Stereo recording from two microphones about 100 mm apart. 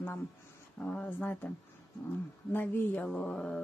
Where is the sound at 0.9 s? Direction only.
15° left (ahead or behind).